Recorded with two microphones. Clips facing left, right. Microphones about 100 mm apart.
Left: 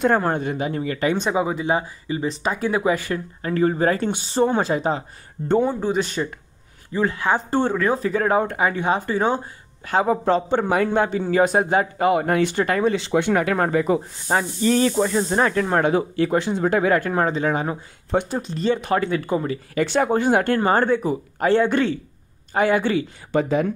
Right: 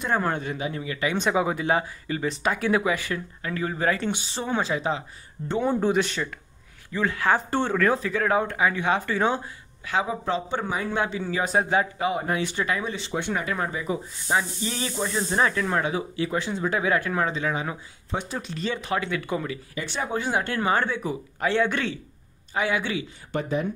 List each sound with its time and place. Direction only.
0.4 s speech: 45° left (ahead or behind)
1.3 s speech: 25° left (ahead or behind); by 5.0 s 45° left (ahead or behind)
5.6 s speech: centre (ahead or behind)
5.9 s speech: 35° left (ahead or behind)
9.8 s speech: 45° left (ahead or behind)
12.9 s speech: 90° left; by 14.0 s 65° left (ahead or behind)
14.3 s a sound: 55° left (ahead or behind)
15.0 s speech: 35° left (ahead or behind)
18.1 s a sound: 55° left (ahead or behind)
18.4 s speech: 40° left (ahead or behind)
19.7 s speech: 70° left (ahead or behind)
20.1 s speech: 50° left (ahead or behind)